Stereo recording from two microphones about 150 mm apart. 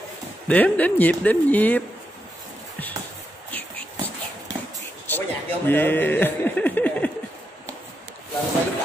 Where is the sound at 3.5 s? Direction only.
10° left (ahead or behind).